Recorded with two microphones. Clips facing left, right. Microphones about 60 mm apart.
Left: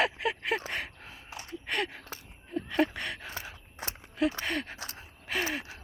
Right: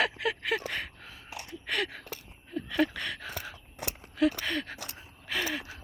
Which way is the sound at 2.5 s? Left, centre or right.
Left.